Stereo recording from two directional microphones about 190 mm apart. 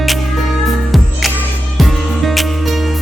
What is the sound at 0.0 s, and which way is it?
Music, centre (ahead or behind).